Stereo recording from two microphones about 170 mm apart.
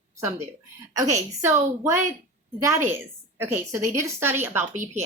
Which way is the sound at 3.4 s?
15° right (ahead or behind).